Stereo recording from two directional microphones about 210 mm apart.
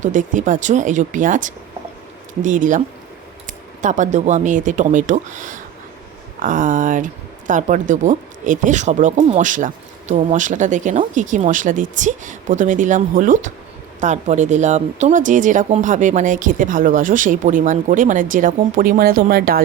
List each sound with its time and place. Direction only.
0.0 s speech: 35° right (ahead or behind)